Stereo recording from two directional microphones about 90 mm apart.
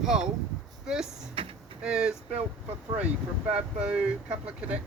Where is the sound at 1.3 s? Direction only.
90° right.